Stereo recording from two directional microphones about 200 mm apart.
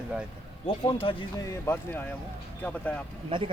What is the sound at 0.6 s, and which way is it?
Speech, 25° left (ahead or behind).